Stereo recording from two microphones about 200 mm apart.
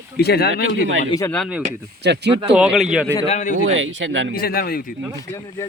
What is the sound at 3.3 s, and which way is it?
Speech, 35° left (ahead or behind).